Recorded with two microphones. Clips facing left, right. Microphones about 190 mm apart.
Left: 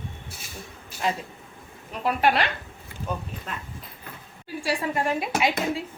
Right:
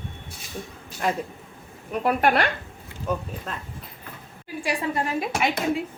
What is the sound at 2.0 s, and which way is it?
Speech, 50° right (ahead or behind).